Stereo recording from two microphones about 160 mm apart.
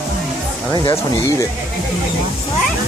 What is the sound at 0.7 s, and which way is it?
Speech, 20° left (ahead or behind).